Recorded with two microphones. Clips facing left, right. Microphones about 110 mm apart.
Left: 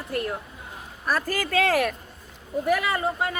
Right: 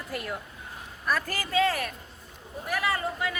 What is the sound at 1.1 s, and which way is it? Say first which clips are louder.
Speech: left 4 dB; 40° left (ahead or behind).